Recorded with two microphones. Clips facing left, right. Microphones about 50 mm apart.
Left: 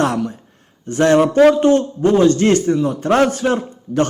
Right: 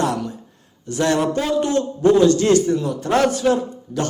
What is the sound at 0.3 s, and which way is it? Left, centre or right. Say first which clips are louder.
A man's voice: left 1 dB; left.